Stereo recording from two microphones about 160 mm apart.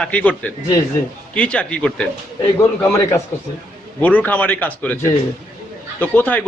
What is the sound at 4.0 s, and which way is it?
A man's voice, 10° left (ahead or behind).